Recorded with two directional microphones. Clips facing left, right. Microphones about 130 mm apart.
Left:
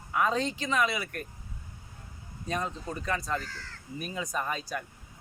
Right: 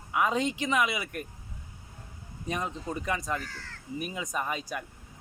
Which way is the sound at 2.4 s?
15° right (ahead or behind).